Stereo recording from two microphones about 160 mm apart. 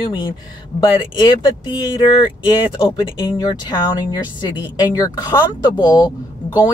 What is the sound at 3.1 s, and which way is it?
Speech, 25° left (ahead or behind).